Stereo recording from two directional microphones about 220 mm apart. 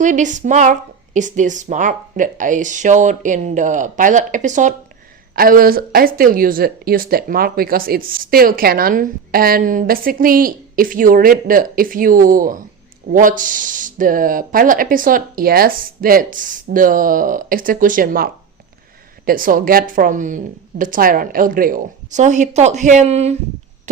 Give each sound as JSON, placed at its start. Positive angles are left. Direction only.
{"t": 0.0, "sound": "speech", "side_deg": -35}